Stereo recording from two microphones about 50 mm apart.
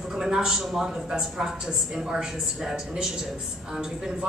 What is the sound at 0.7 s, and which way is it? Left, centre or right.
A woman's voice, centre.